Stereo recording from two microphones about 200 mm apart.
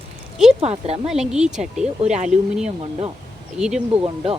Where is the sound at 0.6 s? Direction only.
30° right (ahead or behind).